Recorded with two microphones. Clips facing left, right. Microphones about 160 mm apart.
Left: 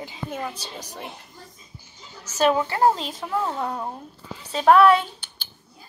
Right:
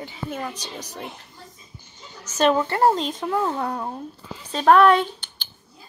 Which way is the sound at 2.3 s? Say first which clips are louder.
Right 1 dB; 10° left (ahead or behind).